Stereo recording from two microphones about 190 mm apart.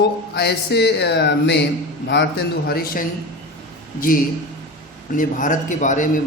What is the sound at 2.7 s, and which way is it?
A man's voice, 55° left (ahead or behind).